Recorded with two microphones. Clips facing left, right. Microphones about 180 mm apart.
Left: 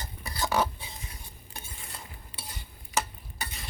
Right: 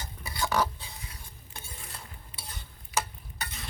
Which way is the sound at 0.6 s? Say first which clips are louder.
Even; 20° left (ahead or behind).